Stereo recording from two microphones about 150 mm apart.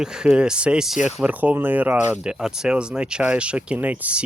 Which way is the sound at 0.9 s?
50° left (ahead or behind).